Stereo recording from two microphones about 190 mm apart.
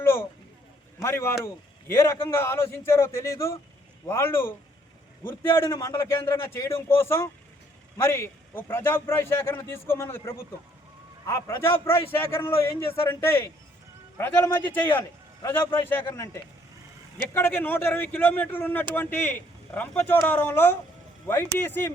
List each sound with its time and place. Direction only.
1.0 s a man's voice: 15° left (ahead or behind)